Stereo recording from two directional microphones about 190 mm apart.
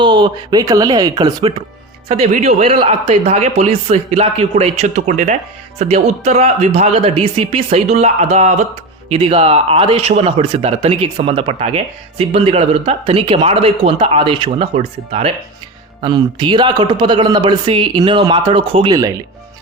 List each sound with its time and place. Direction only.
0.0 s a man's voice: 25° right (ahead or behind)